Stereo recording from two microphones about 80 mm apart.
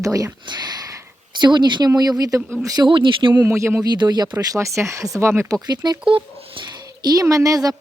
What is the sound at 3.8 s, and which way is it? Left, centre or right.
Speech, right.